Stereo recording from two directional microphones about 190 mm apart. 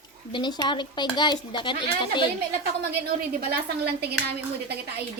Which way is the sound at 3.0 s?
55° right (ahead or behind).